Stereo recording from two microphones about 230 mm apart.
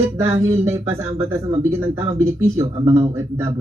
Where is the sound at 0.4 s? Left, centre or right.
Centre.